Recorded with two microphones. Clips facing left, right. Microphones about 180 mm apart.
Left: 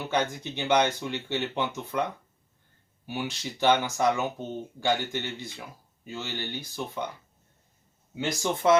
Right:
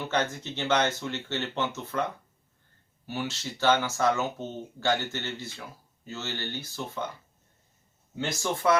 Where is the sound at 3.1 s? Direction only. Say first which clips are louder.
Even; 15° left (ahead or behind).